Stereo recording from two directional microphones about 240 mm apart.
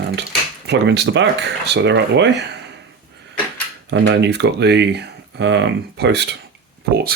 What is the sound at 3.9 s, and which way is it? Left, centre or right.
Speech, right.